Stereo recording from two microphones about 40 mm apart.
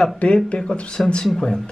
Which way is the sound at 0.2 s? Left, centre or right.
Left.